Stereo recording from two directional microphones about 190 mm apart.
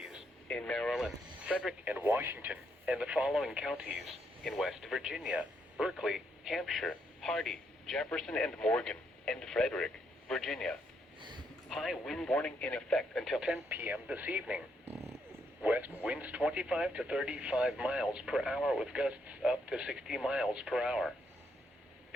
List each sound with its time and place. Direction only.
0.0 s speech: centre (ahead or behind)
11.2 s a sound: 25° right (ahead or behind)
11.7 s speech: centre (ahead or behind)